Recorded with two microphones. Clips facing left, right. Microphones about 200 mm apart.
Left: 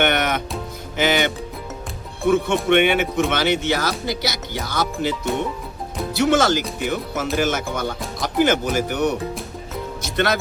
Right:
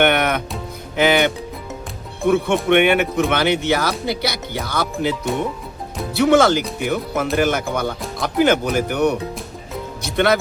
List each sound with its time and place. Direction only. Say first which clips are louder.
0.0 s music: right 3 dB; 55° right (ahead or behind)
0.9 s speech: right 4 dB; 55° right (ahead or behind)
6.1 s speech: right 4 dB; 55° right (ahead or behind)
10.2 s speech: right 4 dB; 55° right (ahead or behind)